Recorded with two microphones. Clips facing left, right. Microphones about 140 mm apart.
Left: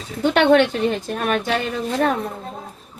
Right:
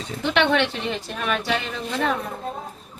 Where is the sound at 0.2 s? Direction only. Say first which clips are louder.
Left 6 dB; 45° left (ahead or behind).